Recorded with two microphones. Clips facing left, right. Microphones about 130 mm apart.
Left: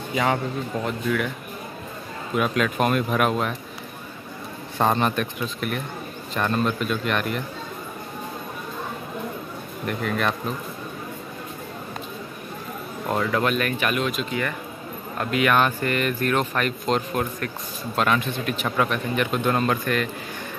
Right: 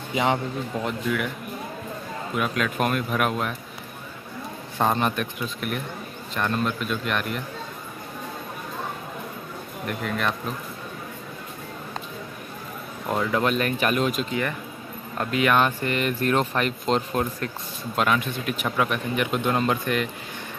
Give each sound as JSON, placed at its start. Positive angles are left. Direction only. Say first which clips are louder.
{"t": 0.1, "sound": "a man's voice", "louder": "even", "side_deg": -20}
{"t": 2.3, "sound": "speech", "louder": "left 3 dB", "side_deg": 0}
{"t": 4.7, "sound": "speech", "louder": "left 2 dB", "side_deg": -5}
{"t": 10.0, "sound": "speech", "louder": "left 2 dB", "side_deg": 0}
{"t": 13.3, "sound": "speech", "louder": "even", "side_deg": -25}
{"t": 15.3, "sound": "speech", "louder": "left 1 dB", "side_deg": -25}
{"t": 17.9, "sound": "speech", "louder": "left 1 dB", "side_deg": -10}